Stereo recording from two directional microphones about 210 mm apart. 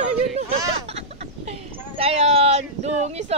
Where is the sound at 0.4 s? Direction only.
30° right (ahead or behind).